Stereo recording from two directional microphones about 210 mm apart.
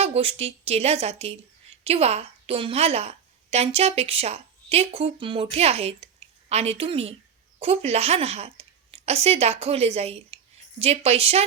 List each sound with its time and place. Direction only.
0.0 s a woman's voice: 30° right (ahead or behind)